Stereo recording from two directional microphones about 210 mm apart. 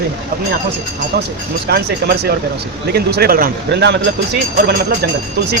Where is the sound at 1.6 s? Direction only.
50° right (ahead or behind).